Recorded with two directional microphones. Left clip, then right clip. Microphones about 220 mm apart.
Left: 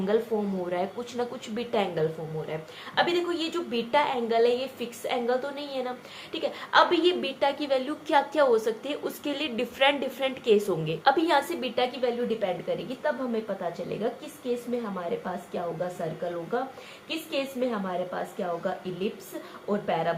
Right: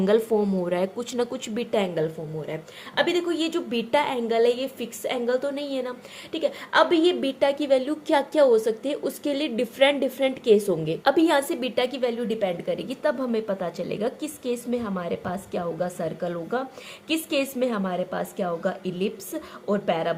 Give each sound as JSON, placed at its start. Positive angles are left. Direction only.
{"t": 0.6, "sound": "a woman's voice", "side_deg": -50}